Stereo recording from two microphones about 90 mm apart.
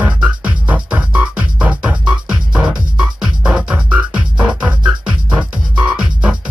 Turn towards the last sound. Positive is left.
turn(degrees=-10)  # may be behind; listen again after turning